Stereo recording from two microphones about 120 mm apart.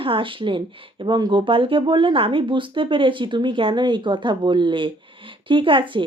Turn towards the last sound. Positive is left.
turn(degrees=-45)  # may be behind; listen again after turning